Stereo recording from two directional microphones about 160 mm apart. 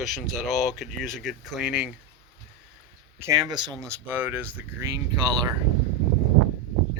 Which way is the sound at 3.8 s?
15° right (ahead or behind).